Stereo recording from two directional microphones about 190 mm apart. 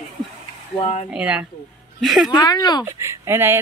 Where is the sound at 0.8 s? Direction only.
30° left (ahead or behind).